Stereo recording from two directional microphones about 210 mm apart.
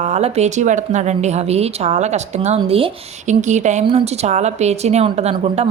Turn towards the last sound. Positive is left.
turn(degrees=-30)  # may be behind; listen again after turning